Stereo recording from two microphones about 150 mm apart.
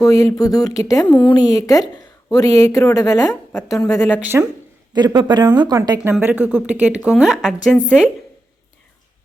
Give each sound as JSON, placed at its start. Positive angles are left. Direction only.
{"t": 0.0, "sound": "a woman's voice", "side_deg": 20}
{"t": 4.9, "sound": "speech", "side_deg": -25}
{"t": 6.0, "sound": "speech", "side_deg": -10}